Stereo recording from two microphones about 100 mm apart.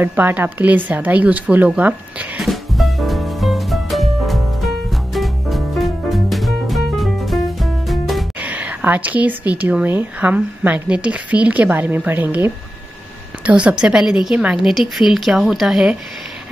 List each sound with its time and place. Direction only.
0.0 s speech: 15° right (ahead or behind)
2.4 s music: centre (ahead or behind)
8.4 s speech: 15° right (ahead or behind)